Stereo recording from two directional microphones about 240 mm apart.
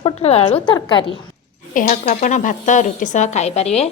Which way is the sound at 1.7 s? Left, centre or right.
Left.